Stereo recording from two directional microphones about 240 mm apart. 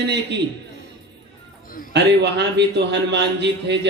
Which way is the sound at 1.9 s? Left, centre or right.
Right.